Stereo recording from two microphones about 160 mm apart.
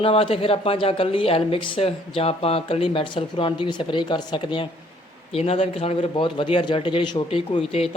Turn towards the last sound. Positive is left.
turn(degrees=35)  # may be behind; listen again after turning